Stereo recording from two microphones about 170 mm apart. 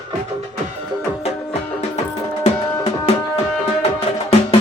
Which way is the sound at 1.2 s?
40° left (ahead or behind).